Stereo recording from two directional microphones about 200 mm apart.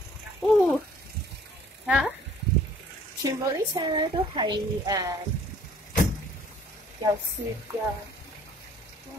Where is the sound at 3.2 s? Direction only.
20° right (ahead or behind).